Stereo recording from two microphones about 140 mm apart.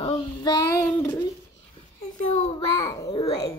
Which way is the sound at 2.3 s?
55° left (ahead or behind).